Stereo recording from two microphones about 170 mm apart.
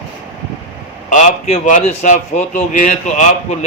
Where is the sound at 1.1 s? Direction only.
45° left (ahead or behind).